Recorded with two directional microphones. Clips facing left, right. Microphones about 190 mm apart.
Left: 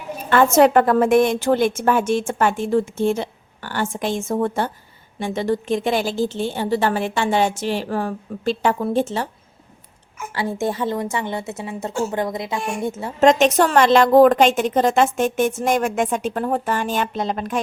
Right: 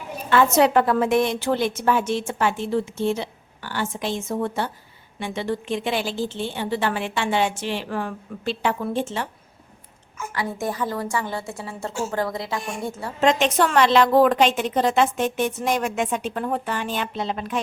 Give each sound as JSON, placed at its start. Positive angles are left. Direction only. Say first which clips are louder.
{"t": 0.3, "sound": "a woman's voice", "louder": "left 3 dB", "side_deg": 50}
{"t": 10.3, "sound": "a woman's voice", "louder": "left 4 dB", "side_deg": 25}
{"t": 13.1, "sound": "a woman's voice", "louder": "left 5 dB", "side_deg": 45}